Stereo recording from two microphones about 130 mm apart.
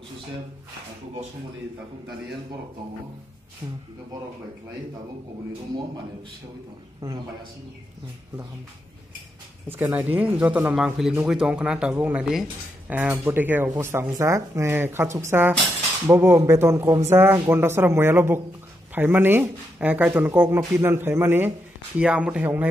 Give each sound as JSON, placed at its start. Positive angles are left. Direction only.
{"t": 7.0, "sound": "a man's voice", "side_deg": -30}
{"t": 9.7, "sound": "speech", "side_deg": -15}
{"t": 12.9, "sound": "speech", "side_deg": -15}